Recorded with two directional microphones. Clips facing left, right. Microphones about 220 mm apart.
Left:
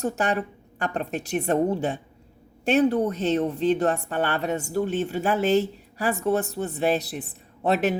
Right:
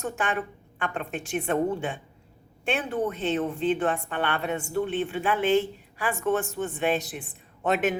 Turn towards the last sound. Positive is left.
turn(degrees=35)  # may be behind; listen again after turning